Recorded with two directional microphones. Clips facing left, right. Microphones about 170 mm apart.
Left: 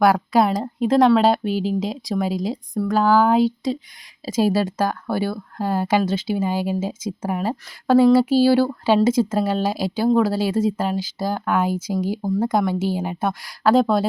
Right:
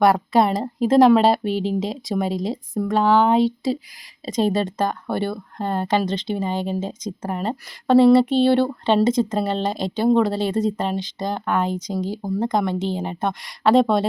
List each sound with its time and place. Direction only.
0.0 s speech: centre (ahead or behind)